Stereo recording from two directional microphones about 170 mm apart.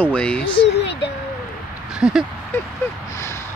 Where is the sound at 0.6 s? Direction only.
90° left.